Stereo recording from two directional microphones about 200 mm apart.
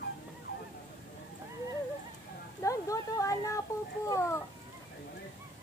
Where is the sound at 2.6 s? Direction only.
15° left (ahead or behind).